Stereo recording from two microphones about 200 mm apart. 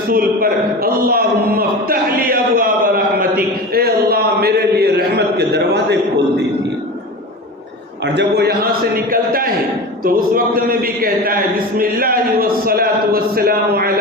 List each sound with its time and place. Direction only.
0.1 s a man's voice: 45° right (ahead or behind)
8.0 s a man's voice: 60° right (ahead or behind)